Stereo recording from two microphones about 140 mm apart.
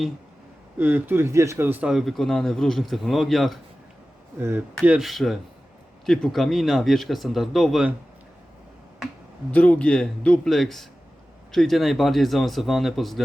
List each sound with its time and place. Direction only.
0.8 s speech: 15° right (ahead or behind)
4.4 s speech: 15° right (ahead or behind)
4.8 s speech: 5° right (ahead or behind)
9.5 s speech: 10° left (ahead or behind)